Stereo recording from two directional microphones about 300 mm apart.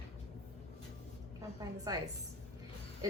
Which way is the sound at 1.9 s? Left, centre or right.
Centre.